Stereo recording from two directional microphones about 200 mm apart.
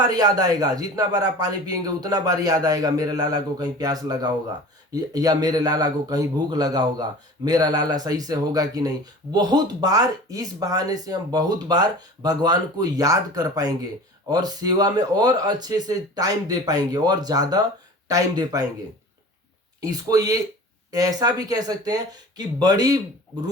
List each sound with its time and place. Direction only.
0.0 s speech: 20° right (ahead or behind)
19.8 s speech: 20° right (ahead or behind)